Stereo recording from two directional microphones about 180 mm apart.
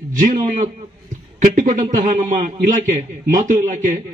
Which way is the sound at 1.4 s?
45° right (ahead or behind).